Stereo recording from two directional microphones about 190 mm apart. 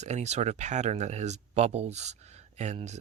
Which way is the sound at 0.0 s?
35° right (ahead or behind).